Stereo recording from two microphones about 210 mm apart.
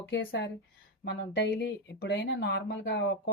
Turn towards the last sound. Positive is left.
turn(degrees=55)  # may be behind; listen again after turning